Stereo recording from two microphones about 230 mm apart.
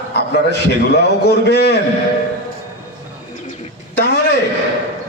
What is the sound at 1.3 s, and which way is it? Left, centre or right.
Speech, left.